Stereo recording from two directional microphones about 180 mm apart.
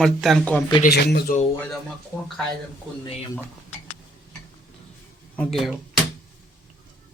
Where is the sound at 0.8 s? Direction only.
60° left (ahead or behind).